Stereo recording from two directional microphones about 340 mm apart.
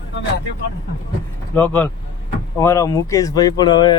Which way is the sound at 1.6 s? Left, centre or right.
Centre.